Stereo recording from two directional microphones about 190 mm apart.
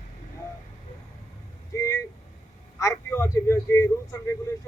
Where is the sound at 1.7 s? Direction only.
15° left (ahead or behind).